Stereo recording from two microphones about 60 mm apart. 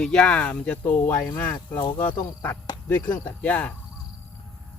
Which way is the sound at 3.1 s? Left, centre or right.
Left.